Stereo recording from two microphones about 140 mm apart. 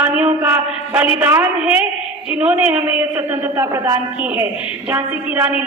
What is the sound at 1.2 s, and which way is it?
A woman's voice, 15° right (ahead or behind).